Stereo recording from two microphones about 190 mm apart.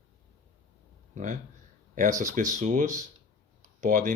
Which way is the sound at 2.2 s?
40° right (ahead or behind).